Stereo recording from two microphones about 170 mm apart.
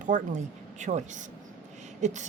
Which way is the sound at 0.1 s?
50° right (ahead or behind).